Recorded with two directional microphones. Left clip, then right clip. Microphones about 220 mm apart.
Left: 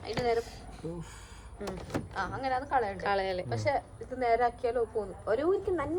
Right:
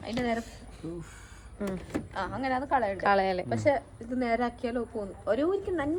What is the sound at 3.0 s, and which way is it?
Speech, 10° right (ahead or behind).